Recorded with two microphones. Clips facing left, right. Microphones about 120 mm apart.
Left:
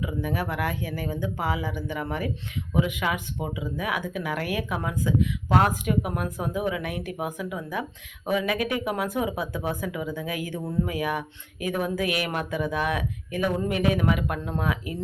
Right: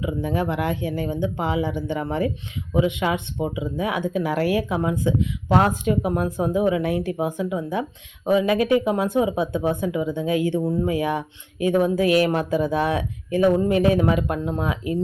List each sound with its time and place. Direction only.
0.0 s speech: 25° right (ahead or behind)